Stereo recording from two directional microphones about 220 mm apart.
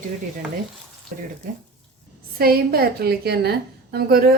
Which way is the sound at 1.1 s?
40° right (ahead or behind).